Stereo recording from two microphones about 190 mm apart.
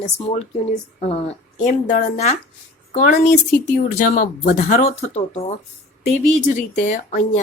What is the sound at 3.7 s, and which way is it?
Speech, 45° left (ahead or behind).